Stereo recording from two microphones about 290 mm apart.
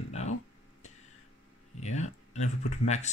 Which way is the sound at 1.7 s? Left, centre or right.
Left.